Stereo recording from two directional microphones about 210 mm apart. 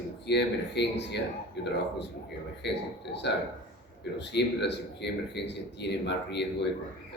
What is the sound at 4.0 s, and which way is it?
A man's voice, 55° left (ahead or behind).